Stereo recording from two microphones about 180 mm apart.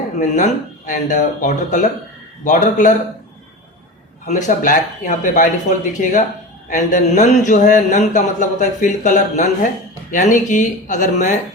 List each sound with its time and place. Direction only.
0.2 s speech: 45° left (ahead or behind)
4.3 s speech: 45° left (ahead or behind)